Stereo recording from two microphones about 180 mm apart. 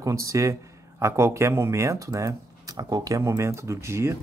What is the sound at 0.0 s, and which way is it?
A man's voice, 15° right (ahead or behind).